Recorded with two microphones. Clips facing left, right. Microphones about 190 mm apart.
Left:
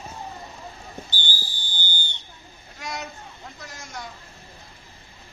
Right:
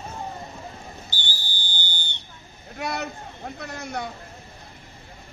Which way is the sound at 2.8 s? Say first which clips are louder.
Right 5 dB; 60° right (ahead or behind).